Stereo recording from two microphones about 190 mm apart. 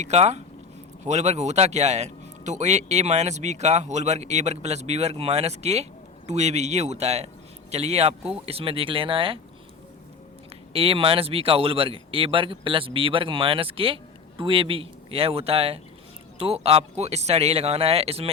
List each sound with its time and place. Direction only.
0.0 s speech: 35° right (ahead or behind)
10.7 s speech: 30° right (ahead or behind)